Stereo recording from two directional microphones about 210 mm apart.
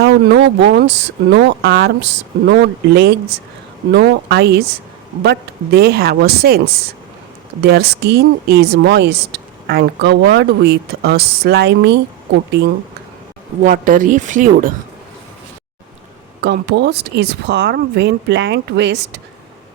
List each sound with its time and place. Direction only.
0.0 s a woman's voice: 55° right (ahead or behind)
7.6 s a woman's voice: 50° right (ahead or behind)
13.7 s speech: 40° right (ahead or behind)
16.4 s a woman's voice: 50° right (ahead or behind)